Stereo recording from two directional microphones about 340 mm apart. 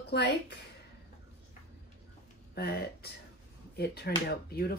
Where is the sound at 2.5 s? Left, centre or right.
Left.